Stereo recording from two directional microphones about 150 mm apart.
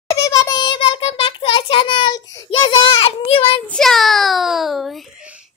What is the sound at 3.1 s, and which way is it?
Child singing, 40° left (ahead or behind).